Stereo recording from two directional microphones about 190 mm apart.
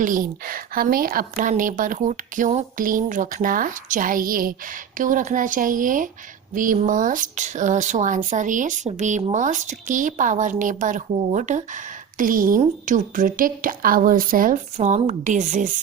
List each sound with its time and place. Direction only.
0.0 s speech: 45° right (ahead or behind)